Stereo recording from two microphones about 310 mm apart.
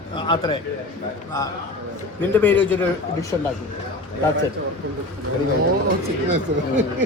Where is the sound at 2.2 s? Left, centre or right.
Centre.